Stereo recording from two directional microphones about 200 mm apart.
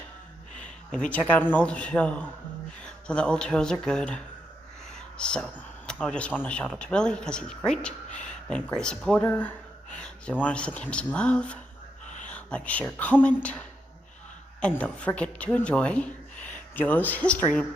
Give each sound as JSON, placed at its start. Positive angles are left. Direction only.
{"t": 0.9, "sound": "speech", "side_deg": 5}
{"t": 12.0, "sound": "a sound", "side_deg": 40}
{"t": 12.3, "sound": "speech", "side_deg": 5}